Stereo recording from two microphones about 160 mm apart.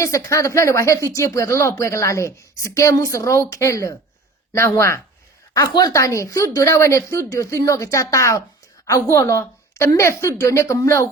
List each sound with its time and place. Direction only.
0.0 s a woman's voice: 20° left (ahead or behind)